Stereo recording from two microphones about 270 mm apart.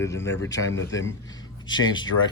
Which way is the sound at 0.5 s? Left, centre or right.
Left.